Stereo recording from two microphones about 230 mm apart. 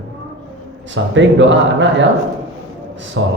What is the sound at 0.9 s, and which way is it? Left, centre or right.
A woman's voice, right.